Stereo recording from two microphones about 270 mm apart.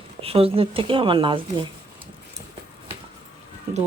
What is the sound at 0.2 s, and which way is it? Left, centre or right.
Speech, right.